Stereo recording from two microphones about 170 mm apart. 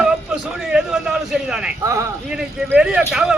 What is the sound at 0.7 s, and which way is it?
A man's voice, 5° right (ahead or behind).